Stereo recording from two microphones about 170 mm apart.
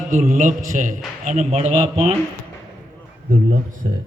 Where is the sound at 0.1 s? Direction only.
50° right (ahead or behind).